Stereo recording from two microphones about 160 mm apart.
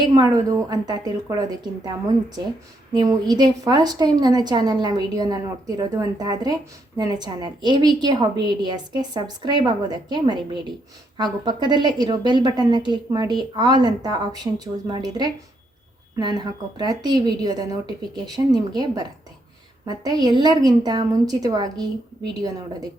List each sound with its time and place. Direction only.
0.0 s a woman's voice: 25° right (ahead or behind)
2.9 s a woman's voice: 25° right (ahead or behind)